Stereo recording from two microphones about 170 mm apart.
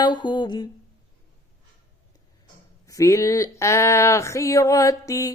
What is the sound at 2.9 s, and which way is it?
Speech, 20° left (ahead or behind).